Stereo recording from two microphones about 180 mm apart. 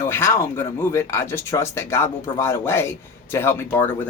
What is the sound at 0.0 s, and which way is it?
Speech, 15° left (ahead or behind).